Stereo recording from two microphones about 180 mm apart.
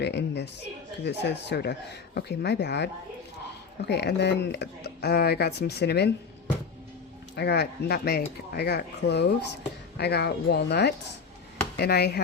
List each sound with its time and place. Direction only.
0.0 s speech: 70° left (ahead or behind)
7.3 s speech: 65° left (ahead or behind)